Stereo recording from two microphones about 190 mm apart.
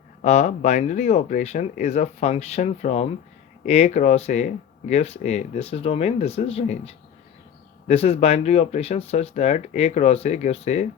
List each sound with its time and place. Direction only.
0.2 s speech: 40° left (ahead or behind)